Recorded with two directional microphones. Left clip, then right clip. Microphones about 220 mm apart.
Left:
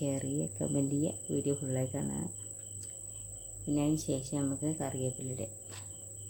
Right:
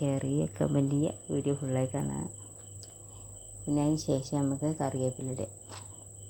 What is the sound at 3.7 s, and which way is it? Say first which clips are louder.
Speech: right 3 dB; 10° right (ahead or behind).